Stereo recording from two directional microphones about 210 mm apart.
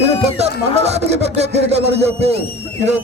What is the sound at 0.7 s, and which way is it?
A man's voice, 30° right (ahead or behind).